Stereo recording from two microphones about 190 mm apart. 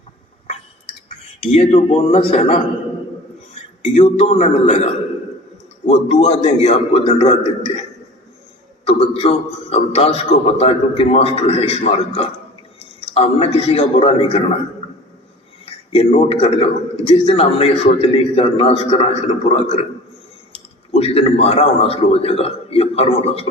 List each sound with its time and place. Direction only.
1.4 s a man's voice: 35° left (ahead or behind)
3.9 s a man's voice: 35° left (ahead or behind)
8.9 s a man's voice: 30° left (ahead or behind)
15.6 s a man's voice: 35° left (ahead or behind)